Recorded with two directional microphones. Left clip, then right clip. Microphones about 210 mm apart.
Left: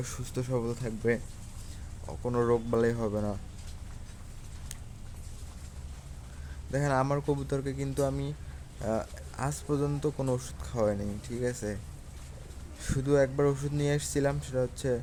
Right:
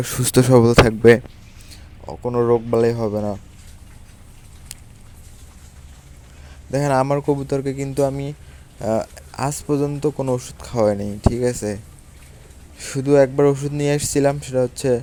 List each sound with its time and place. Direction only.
0.0 s speech: 40° right (ahead or behind)
2.0 s speech: 25° right (ahead or behind)
6.7 s speech: 30° right (ahead or behind)
12.8 s speech: 30° right (ahead or behind)